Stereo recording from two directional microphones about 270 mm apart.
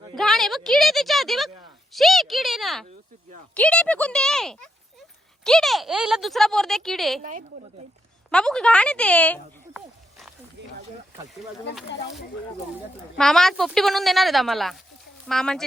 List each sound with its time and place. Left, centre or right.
0.2 s speech: centre
7.2 s a woman's voice: right
8.3 s speech: centre
13.1 s speech: centre